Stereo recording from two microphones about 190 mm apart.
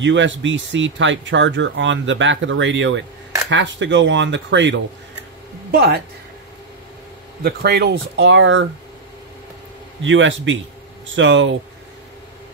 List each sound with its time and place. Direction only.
0.0 s speech: 75° right (ahead or behind)
5.7 s speech: 55° right (ahead or behind)
7.4 s speech: 55° right (ahead or behind); by 8.6 s 80° right
10.0 s a man's voice: 80° right